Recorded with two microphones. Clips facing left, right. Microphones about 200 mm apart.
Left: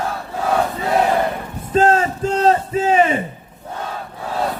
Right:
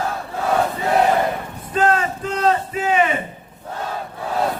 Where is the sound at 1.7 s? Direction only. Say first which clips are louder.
Left 4 dB; 35° left (ahead or behind).